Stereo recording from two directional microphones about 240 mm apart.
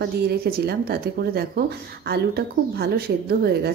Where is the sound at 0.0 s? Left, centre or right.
Right.